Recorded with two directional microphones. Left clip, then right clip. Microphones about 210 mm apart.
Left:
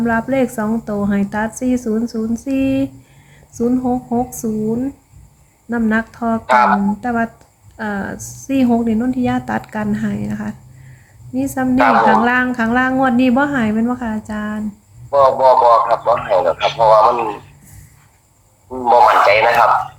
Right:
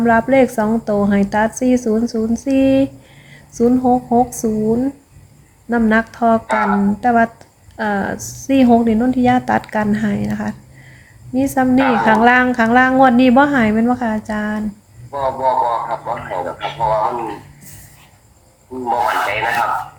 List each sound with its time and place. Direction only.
0.0 s a woman's voice: 10° right (ahead or behind)
6.5 s a man's voice: 50° left (ahead or behind)
7.0 s a woman's voice: 10° right (ahead or behind)
11.8 s a man's voice: 50° left (ahead or behind)
12.0 s a woman's voice: 10° right (ahead or behind)
15.1 s a man's voice: 50° left (ahead or behind)
18.9 s a man's voice: 50° left (ahead or behind)